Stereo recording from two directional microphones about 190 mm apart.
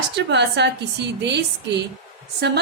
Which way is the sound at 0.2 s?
65° right (ahead or behind).